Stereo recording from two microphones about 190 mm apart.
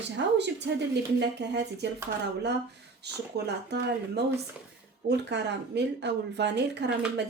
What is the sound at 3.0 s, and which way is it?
Speech, 60° right (ahead or behind).